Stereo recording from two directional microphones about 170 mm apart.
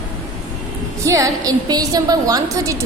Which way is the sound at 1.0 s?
20° right (ahead or behind).